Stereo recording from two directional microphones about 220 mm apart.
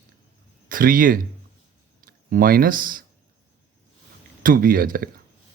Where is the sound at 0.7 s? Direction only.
40° right (ahead or behind).